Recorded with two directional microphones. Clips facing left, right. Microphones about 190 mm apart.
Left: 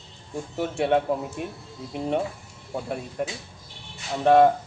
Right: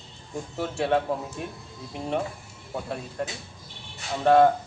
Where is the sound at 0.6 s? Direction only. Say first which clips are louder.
Left 2 dB; 20° left (ahead or behind).